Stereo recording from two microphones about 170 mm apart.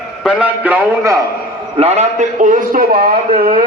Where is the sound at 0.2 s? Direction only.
5° right (ahead or behind).